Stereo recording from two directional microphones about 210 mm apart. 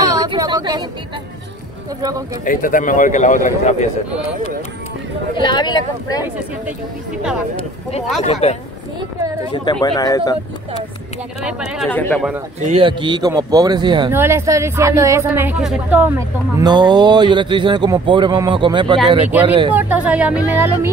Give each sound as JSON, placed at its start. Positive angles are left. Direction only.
{"t": 0.2, "sound": "a sound", "side_deg": -20}
{"t": 2.0, "sound": "a woman's voice", "side_deg": -20}
{"t": 2.4, "sound": "a man's voice", "side_deg": 40}
{"t": 5.3, "sound": "speech", "side_deg": 20}
{"t": 8.2, "sound": "a man's voice", "side_deg": 30}
{"t": 9.7, "sound": "speech", "side_deg": 20}
{"t": 11.4, "sound": "speech", "side_deg": -5}
{"t": 12.5, "sound": "speech", "side_deg": -30}
{"t": 14.1, "sound": "a woman's voice", "side_deg": -10}
{"t": 16.5, "sound": "speech", "side_deg": -20}
{"t": 19.7, "sound": "a woman's voice", "side_deg": -10}